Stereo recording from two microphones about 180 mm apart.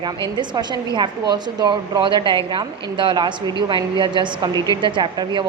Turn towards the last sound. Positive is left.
turn(degrees=-25)  # may be behind; listen again after turning